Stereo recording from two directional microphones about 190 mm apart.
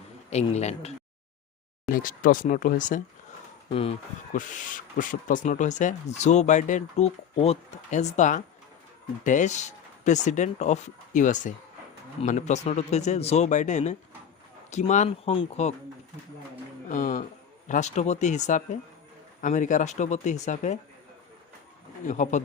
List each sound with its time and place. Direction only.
0.3 s speech: 35° left (ahead or behind)
1.9 s speech: 45° left (ahead or behind)
3.7 s speech: 30° left (ahead or behind)
4.4 s speech: 45° left (ahead or behind)
16.9 s speech: 45° left (ahead or behind)
22.0 s speech: 40° left (ahead or behind)